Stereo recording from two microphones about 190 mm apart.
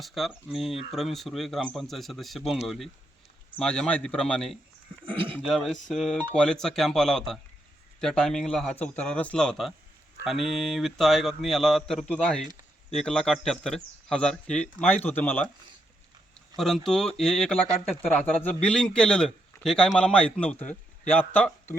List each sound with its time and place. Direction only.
0.0 s a man's voice: centre (ahead or behind)
5.0 s speech: 25° right (ahead or behind)
5.5 s a man's voice: centre (ahead or behind)
16.6 s a man's voice: centre (ahead or behind)